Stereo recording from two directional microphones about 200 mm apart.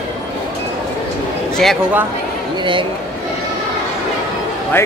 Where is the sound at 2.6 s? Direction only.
25° right (ahead or behind).